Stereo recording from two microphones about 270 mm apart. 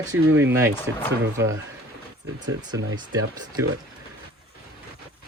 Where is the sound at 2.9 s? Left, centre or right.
Centre.